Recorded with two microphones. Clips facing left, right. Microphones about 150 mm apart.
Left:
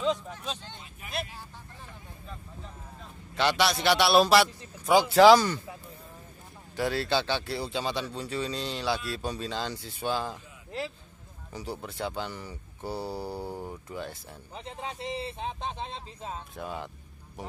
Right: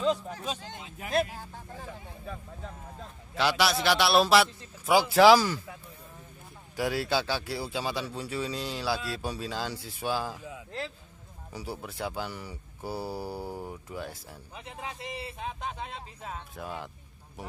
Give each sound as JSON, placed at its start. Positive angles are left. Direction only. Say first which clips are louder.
{"t": 0.0, "sound": "speech", "louder": "right 1 dB", "side_deg": 0}
{"t": 0.8, "sound": "speech", "louder": "right 6 dB", "side_deg": -90}
{"t": 1.1, "sound": "speech", "louder": "right 8 dB", "side_deg": -45}
{"t": 3.3, "sound": "speech", "louder": "even", "side_deg": -5}
{"t": 6.8, "sound": "speech", "louder": "left 1 dB", "side_deg": -10}
{"t": 11.5, "sound": "speech", "louder": "left 1 dB", "side_deg": -10}
{"t": 14.5, "sound": "a man's voice", "louder": "left 3 dB", "side_deg": 30}
{"t": 16.5, "sound": "speech", "louder": "left 1 dB", "side_deg": 0}